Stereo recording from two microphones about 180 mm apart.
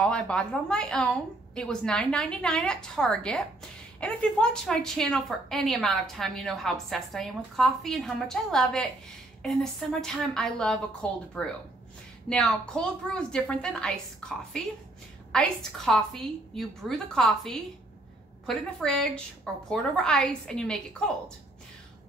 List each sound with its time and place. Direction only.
0.0 s a woman's voice: 5° left (ahead or behind)